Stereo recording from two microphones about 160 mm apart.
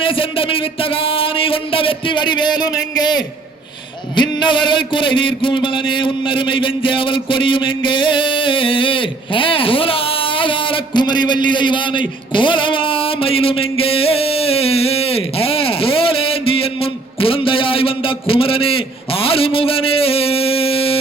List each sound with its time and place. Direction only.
0.0 s a man's voice: 35° left (ahead or behind)